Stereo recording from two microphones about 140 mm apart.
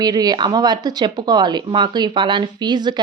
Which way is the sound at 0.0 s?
30° right (ahead or behind).